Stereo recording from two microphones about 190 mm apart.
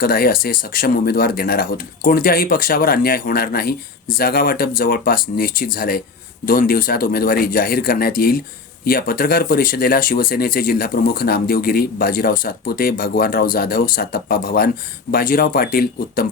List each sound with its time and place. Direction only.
0.0 s speech: 50° left (ahead or behind)